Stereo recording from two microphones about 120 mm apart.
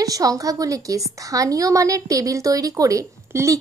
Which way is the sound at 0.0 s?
30° right (ahead or behind).